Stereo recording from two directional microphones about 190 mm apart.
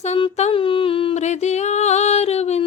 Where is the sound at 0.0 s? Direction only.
30° left (ahead or behind).